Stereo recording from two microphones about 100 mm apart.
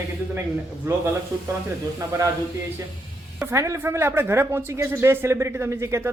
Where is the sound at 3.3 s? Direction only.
30° right (ahead or behind).